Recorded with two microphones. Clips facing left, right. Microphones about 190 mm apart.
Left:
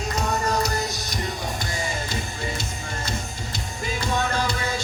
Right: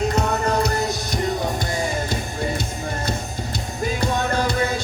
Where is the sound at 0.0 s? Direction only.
60° right (ahead or behind).